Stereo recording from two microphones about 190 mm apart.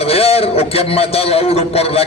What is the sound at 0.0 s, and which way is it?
A man's voice, 30° left (ahead or behind).